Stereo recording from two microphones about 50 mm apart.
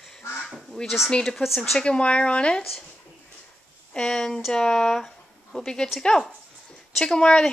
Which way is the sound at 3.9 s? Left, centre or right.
Centre.